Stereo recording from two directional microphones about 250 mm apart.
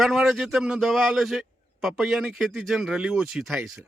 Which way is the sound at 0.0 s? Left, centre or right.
Centre.